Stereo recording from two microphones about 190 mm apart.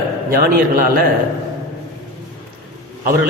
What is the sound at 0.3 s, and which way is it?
Speech, 50° right (ahead or behind).